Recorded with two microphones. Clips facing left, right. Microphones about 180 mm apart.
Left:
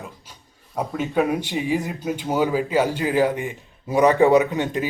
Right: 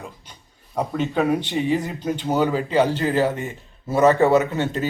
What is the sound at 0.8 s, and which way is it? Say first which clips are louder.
Speech: even; 10° left (ahead or behind).